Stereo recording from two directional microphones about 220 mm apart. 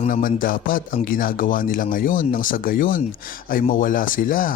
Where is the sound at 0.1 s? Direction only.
40° left (ahead or behind).